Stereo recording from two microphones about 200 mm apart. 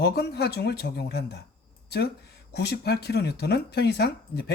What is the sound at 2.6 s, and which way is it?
Speech, 55° left (ahead or behind).